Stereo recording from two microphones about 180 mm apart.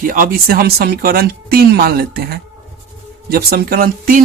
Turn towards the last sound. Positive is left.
turn(degrees=-50)  # may be behind; listen again after turning